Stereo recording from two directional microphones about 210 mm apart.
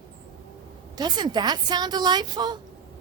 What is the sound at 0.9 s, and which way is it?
A woman's voice, 20° right (ahead or behind).